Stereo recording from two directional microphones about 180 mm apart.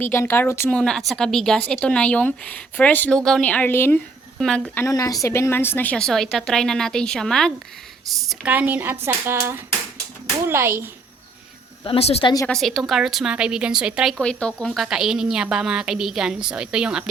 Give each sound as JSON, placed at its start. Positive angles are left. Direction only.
{"t": 0.0, "sound": "a woman's voice", "side_deg": 15}
{"t": 11.8, "sound": "speech", "side_deg": 30}
{"t": 12.5, "sound": "a woman's voice", "side_deg": 0}